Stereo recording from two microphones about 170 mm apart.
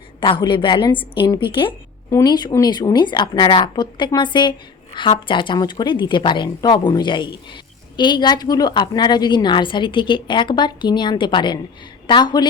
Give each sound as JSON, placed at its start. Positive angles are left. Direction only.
{"t": 0.2, "sound": "a woman's voice", "side_deg": 30}